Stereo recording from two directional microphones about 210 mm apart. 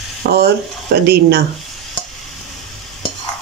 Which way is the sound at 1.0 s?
50° right (ahead or behind).